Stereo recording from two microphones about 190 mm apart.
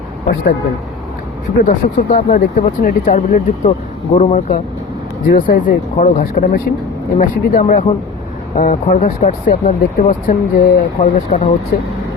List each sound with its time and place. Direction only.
1.6 s speech: 45° left (ahead or behind)